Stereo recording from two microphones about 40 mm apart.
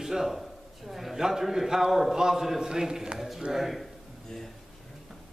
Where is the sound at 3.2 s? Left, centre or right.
Centre.